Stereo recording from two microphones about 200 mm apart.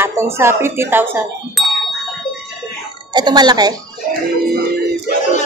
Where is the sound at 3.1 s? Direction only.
20° right (ahead or behind).